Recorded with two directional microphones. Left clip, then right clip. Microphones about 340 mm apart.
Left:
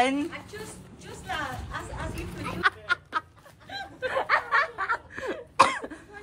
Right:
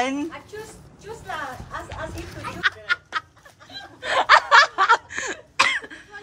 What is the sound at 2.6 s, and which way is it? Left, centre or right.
Chicken, centre.